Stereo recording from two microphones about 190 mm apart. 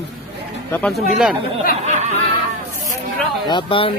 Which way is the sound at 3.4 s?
25° left (ahead or behind).